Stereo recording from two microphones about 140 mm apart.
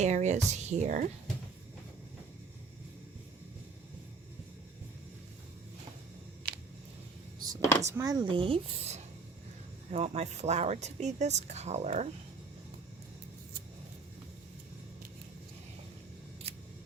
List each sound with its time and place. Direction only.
0.0 s speech: 55° right (ahead or behind)
7.8 s speech: 20° right (ahead or behind); by 12.0 s 55° right (ahead or behind)
16.4 s a sound: 45° right (ahead or behind)